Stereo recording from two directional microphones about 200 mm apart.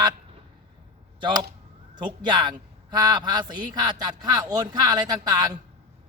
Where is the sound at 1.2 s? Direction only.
25° right (ahead or behind).